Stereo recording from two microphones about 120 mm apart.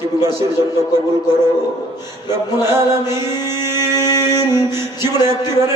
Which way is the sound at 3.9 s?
35° left (ahead or behind).